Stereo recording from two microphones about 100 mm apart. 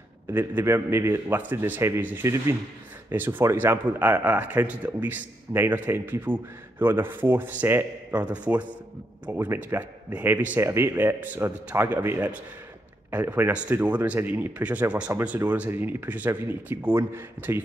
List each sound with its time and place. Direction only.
0.3 s speech: 20° right (ahead or behind)